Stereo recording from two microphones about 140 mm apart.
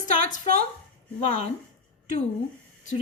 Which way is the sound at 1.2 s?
50° left (ahead or behind).